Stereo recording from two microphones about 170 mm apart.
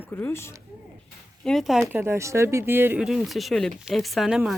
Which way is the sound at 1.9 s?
15° right (ahead or behind).